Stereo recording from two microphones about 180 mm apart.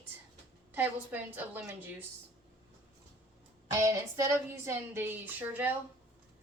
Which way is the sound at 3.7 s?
15° right (ahead or behind).